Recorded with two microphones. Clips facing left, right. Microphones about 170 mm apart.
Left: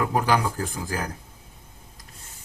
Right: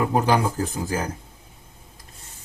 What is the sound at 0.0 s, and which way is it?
Speech, 20° right (ahead or behind).